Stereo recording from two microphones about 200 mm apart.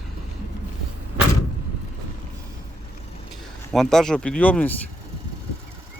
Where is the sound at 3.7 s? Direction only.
Centre (ahead or behind).